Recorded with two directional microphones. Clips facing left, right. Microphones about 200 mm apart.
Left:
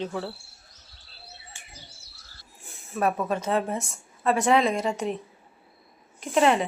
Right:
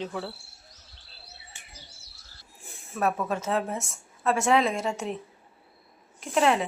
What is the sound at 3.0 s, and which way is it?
A woman's voice, centre (ahead or behind).